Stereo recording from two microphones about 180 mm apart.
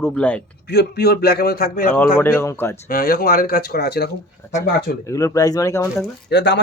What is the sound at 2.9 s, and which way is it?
A man's voice, 55° left (ahead or behind).